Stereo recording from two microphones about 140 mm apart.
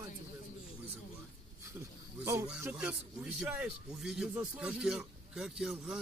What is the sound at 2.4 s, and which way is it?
A man's voice, 10° right (ahead or behind).